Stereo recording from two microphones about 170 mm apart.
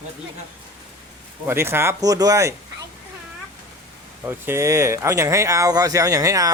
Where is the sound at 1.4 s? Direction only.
15° right (ahead or behind).